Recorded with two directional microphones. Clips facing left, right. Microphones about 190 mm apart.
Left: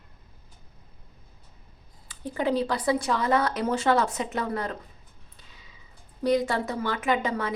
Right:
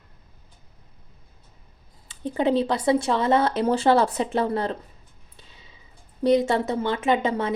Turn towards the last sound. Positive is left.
turn(degrees=-25)  # may be behind; listen again after turning